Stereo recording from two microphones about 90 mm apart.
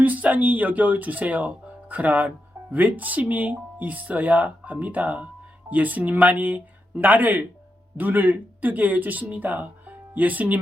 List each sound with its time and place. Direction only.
0.0 s speech: 20° right (ahead or behind)